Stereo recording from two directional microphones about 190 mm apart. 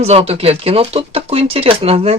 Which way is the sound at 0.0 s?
30° right (ahead or behind).